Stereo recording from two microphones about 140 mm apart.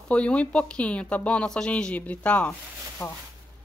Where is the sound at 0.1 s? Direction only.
10° left (ahead or behind).